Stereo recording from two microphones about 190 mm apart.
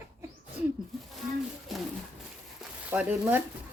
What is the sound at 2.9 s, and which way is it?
Speech, 10° right (ahead or behind).